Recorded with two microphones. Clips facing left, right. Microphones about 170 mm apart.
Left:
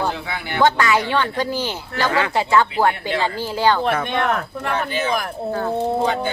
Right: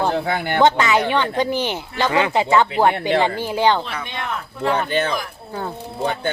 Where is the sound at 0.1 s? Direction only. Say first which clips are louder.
Right 6 dB; 45° right (ahead or behind).